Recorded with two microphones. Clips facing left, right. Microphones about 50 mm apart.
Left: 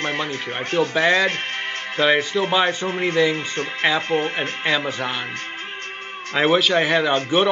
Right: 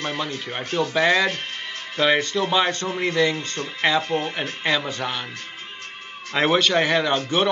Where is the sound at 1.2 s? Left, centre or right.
Left.